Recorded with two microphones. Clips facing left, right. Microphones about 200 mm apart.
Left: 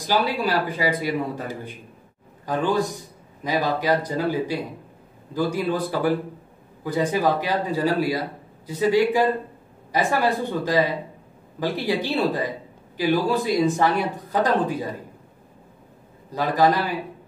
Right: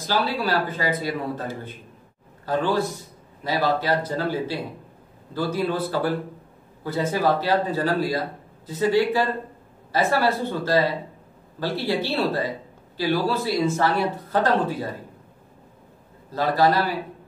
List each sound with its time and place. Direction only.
0.0 s a man's voice: 15° left (ahead or behind)
16.3 s a man's voice: 15° left (ahead or behind)